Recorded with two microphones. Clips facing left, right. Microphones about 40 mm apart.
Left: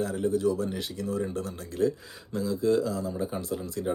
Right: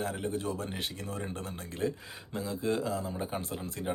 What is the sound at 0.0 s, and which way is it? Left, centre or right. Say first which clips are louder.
Speech: left 7 dB; right.